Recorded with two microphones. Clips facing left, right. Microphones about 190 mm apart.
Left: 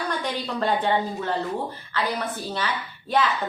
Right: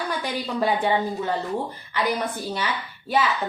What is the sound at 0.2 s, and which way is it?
A woman's voice, 10° right (ahead or behind).